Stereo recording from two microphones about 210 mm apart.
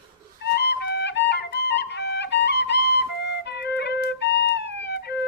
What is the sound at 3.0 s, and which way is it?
Flute, 55° left (ahead or behind).